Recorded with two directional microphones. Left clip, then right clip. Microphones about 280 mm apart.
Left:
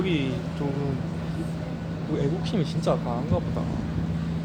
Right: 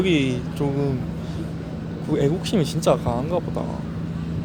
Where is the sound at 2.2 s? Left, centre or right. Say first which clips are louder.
Right 7 dB; right.